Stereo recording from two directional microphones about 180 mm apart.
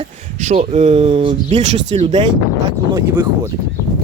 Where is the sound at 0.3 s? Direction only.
40° right (ahead or behind).